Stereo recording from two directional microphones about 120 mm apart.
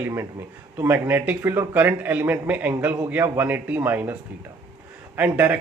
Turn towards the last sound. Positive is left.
turn(degrees=-15)  # may be behind; listen again after turning